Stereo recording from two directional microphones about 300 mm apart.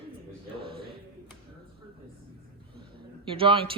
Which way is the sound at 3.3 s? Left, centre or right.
Centre.